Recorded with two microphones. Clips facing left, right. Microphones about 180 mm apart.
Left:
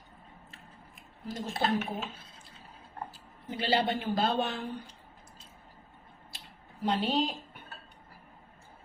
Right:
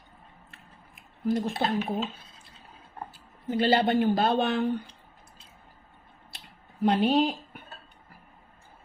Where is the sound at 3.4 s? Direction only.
50° right (ahead or behind); by 4.9 s 65° right (ahead or behind).